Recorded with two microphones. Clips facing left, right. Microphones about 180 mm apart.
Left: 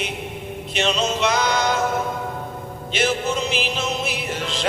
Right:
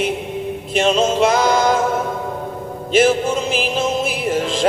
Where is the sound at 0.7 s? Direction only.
50° right (ahead or behind).